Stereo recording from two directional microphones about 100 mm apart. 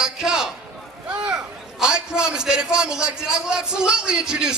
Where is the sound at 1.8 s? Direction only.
5° right (ahead or behind).